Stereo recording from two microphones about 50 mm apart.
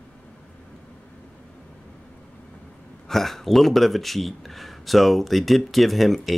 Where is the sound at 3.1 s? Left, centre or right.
Centre.